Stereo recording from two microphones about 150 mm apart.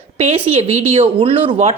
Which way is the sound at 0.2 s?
45° right (ahead or behind).